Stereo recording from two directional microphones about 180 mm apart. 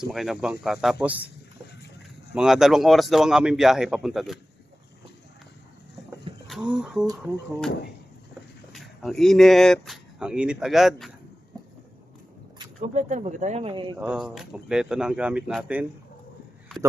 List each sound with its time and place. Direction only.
0.0 s speech: centre (ahead or behind)
2.3 s speech: 5° right (ahead or behind)
6.3 s a sound: 30° right (ahead or behind)
6.7 s speech: 5° right (ahead or behind)
8.7 s speech: centre (ahead or behind)
12.8 s speech: 40° right (ahead or behind)
14.0 s speech: 5° right (ahead or behind)